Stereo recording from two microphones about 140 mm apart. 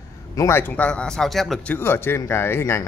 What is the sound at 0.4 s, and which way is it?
Speech, 15° left (ahead or behind).